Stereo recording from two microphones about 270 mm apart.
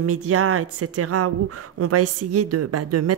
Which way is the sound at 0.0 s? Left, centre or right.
Right.